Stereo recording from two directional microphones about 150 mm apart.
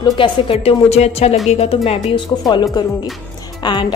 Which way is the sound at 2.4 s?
30° left (ahead or behind).